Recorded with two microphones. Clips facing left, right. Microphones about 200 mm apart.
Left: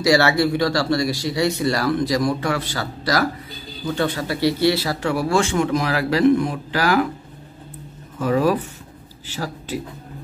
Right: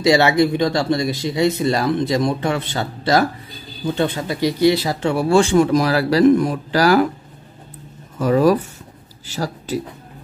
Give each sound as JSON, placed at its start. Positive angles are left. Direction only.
{"t": 0.0, "sound": "speech", "side_deg": -20}
{"t": 8.2, "sound": "speech", "side_deg": -40}